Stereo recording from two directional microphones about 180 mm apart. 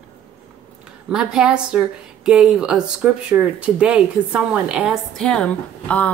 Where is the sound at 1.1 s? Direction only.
5° right (ahead or behind).